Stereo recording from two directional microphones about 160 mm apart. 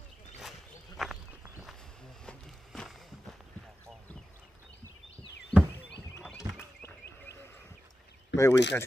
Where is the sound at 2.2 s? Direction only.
5° left (ahead or behind).